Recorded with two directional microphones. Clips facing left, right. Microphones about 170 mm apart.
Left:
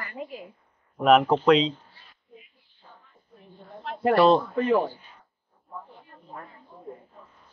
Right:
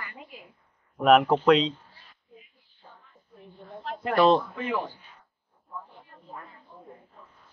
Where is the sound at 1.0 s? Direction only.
Centre (ahead or behind).